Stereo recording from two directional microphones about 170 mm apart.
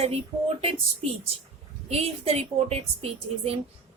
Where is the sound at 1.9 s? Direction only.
35° right (ahead or behind).